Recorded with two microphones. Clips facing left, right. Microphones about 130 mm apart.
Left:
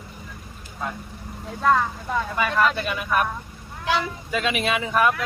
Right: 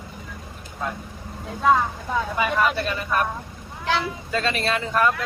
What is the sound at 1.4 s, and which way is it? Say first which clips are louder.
Speech: right 1 dB; 5° right (ahead or behind).